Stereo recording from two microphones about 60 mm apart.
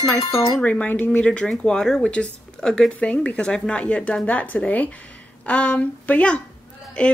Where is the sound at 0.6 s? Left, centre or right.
Left.